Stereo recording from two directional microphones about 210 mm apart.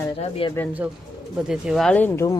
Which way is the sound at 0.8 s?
10° right (ahead or behind).